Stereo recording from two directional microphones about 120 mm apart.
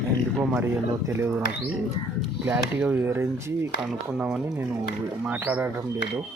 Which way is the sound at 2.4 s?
10° right (ahead or behind).